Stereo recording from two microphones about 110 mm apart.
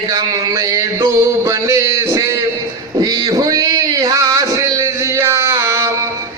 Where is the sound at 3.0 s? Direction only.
35° right (ahead or behind).